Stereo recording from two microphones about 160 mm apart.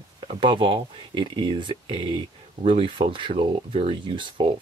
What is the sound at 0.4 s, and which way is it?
Speech, 30° right (ahead or behind).